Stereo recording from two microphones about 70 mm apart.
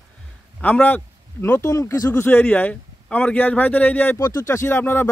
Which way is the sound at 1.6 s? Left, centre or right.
Left.